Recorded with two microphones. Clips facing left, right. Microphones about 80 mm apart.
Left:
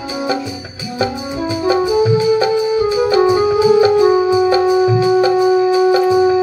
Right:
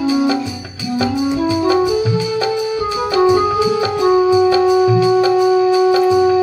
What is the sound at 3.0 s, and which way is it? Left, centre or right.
Music, centre.